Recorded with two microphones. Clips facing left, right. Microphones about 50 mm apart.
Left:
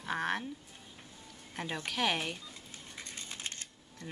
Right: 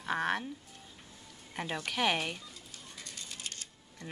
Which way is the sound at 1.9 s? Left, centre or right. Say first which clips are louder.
Right 2 dB; centre.